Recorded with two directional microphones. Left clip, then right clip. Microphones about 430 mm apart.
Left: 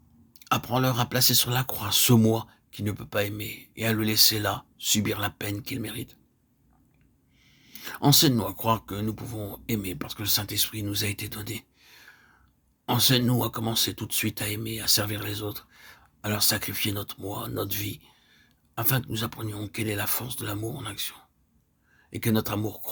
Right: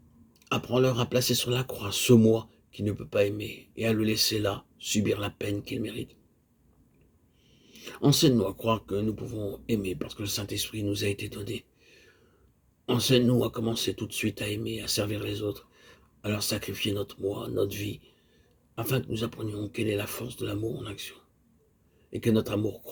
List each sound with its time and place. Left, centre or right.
0.3 s speech: left
7.6 s speech: left